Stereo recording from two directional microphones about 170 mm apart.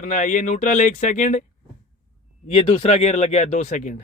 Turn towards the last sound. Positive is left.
turn(degrees=45)  # may be behind; listen again after turning